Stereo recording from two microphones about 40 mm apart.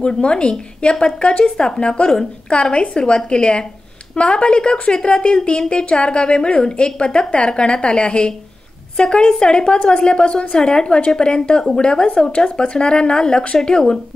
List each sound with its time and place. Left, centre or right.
0.0 s a woman's voice: left